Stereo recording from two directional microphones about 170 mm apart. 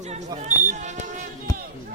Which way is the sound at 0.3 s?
45° right (ahead or behind).